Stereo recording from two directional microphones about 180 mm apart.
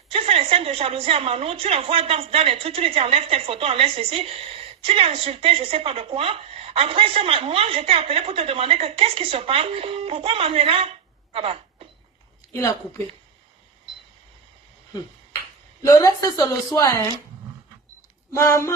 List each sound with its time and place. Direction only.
0.1 s a woman's voice: 35° right (ahead or behind)
15.8 s a woman's voice: 20° left (ahead or behind)
18.3 s speech: 15° left (ahead or behind)